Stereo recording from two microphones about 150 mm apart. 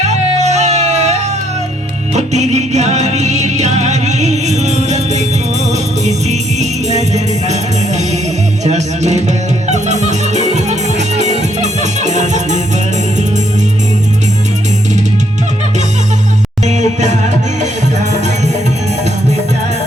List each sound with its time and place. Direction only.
0.0 s music: 50° right (ahead or behind)
16.6 s music: 50° right (ahead or behind)